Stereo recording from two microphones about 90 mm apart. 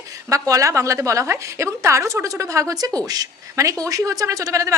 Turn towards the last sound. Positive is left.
turn(degrees=-35)  # may be behind; listen again after turning